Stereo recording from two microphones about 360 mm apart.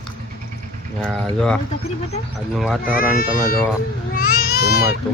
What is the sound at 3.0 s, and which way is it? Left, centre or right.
Speech, left.